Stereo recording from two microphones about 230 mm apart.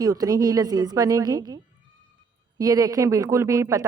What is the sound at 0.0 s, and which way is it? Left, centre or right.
A woman's voice, centre.